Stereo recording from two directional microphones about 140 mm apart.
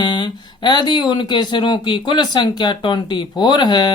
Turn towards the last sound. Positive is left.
turn(degrees=30)  # may be behind; listen again after turning